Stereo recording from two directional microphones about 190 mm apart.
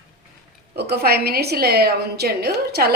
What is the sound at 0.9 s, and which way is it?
A woman's voice, 55° right (ahead or behind).